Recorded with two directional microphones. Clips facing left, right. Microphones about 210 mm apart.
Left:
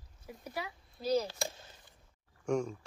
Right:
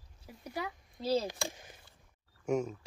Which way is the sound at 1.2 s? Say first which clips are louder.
Right 1 dB; 15° right (ahead or behind).